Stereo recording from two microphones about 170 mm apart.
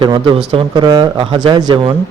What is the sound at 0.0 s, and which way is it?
A man's voice, 30° right (ahead or behind).